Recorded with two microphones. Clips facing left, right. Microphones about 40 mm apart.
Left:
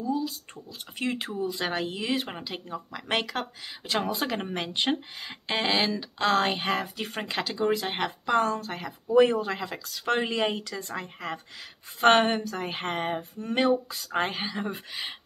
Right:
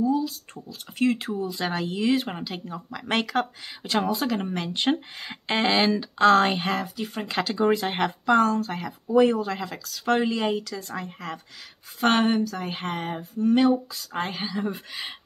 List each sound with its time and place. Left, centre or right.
0.7 s speech: centre
4.1 s speech: centre
4.9 s a sound: centre
5.6 s speech: centre
8.4 s speech: centre
9.0 s speech: centre
14.9 s speech: centre